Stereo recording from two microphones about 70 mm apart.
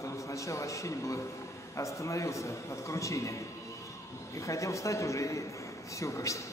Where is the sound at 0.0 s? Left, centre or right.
Left.